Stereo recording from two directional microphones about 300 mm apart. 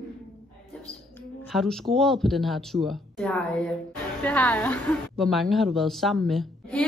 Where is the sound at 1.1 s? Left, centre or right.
Centre.